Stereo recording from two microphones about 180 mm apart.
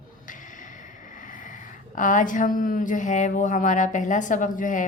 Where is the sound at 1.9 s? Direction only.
45° left (ahead or behind).